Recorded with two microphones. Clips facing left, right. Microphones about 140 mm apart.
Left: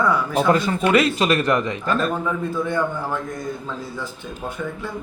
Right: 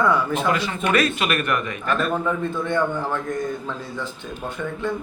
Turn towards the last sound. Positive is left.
turn(degrees=5)  # may be behind; listen again after turning